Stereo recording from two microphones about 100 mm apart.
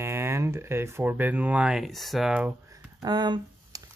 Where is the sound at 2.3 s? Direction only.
10° right (ahead or behind).